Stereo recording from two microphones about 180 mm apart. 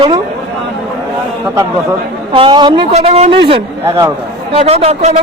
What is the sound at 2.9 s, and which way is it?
A man's voice, 35° right (ahead or behind).